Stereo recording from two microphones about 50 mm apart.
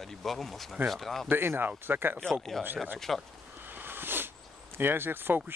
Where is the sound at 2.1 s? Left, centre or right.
Centre.